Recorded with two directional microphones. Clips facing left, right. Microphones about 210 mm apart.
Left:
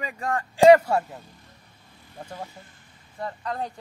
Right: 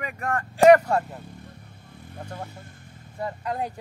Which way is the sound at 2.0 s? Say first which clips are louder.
Right 2 dB; 55° right (ahead or behind).